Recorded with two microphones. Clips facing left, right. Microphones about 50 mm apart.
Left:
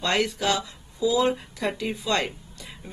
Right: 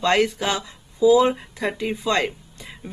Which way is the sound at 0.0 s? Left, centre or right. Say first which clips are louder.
Right 5 dB; right.